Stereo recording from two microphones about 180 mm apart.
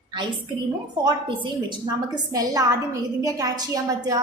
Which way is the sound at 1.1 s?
25° right (ahead or behind).